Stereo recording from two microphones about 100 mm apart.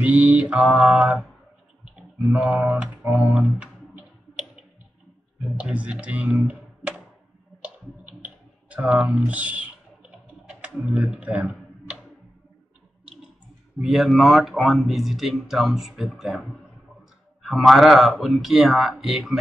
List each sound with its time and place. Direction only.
0.0 s mantra: 15° right (ahead or behind)
2.2 s mantra: 15° right (ahead or behind)
5.6 s mantra: 15° right (ahead or behind)
7.6 s clicking: 15° right (ahead or behind)
10.7 s speech: 5° right (ahead or behind)
13.7 s speech: 5° right (ahead or behind)